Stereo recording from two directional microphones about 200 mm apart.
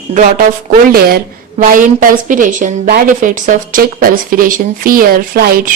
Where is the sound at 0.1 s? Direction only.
40° right (ahead or behind).